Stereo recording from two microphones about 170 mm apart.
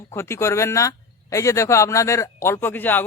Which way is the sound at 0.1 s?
15° left (ahead or behind).